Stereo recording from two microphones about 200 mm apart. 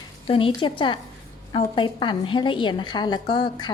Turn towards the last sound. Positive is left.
turn(degrees=25)  # may be behind; listen again after turning